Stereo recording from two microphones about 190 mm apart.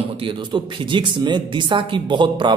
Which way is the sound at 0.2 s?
25° right (ahead or behind).